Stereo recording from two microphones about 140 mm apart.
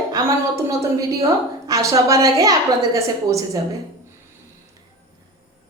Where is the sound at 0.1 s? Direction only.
25° right (ahead or behind).